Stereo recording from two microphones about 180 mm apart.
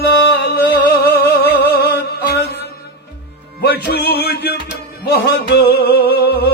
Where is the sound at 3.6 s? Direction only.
65° left (ahead or behind).